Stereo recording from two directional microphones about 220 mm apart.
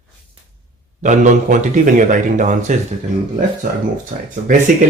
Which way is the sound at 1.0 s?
35° right (ahead or behind).